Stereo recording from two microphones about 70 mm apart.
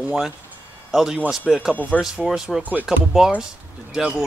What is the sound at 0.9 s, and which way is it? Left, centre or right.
Speech, centre.